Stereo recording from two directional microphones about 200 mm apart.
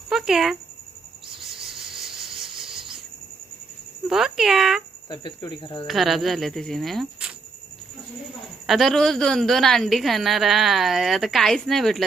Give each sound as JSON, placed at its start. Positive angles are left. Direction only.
{"t": 0.1, "sound": "a sound", "side_deg": 0}
{"t": 1.4, "sound": "cricket", "side_deg": 0}
{"t": 4.1, "sound": "a woman's voice", "side_deg": 0}
{"t": 5.0, "sound": "speech", "side_deg": 20}
{"t": 5.9, "sound": "a woman's voice", "side_deg": 0}
{"t": 8.6, "sound": "a woman's voice", "side_deg": 0}